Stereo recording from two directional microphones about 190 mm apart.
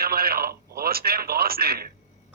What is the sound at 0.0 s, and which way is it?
Speech, 55° right (ahead or behind).